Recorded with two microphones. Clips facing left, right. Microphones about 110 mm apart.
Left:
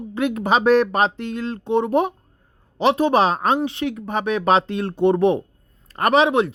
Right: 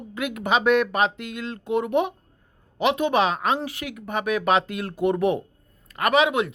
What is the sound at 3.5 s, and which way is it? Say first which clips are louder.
Speech: left 7 dB; 25° left (ahead or behind).